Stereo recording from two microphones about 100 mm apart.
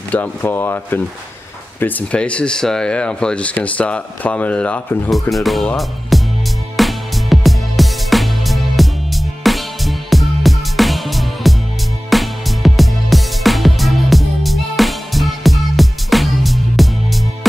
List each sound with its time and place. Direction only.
0.1 s speech: 20° left (ahead or behind)
5.3 s speech: centre (ahead or behind)
6.8 s music: centre (ahead or behind)